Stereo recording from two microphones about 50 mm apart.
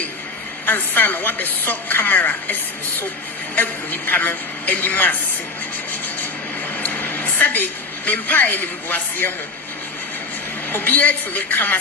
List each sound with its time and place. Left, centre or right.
0.6 s a woman's voice: left
6.7 s vehicle: left
7.3 s a woman's voice: left
10.7 s a woman's voice: left